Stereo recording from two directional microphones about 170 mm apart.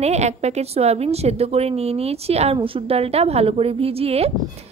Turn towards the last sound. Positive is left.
turn(degrees=-35)  # may be behind; listen again after turning